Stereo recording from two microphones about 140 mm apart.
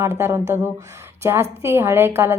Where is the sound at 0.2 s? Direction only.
20° right (ahead or behind).